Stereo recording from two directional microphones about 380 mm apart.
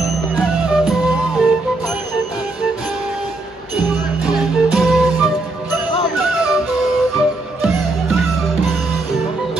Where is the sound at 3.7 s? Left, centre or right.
Centre.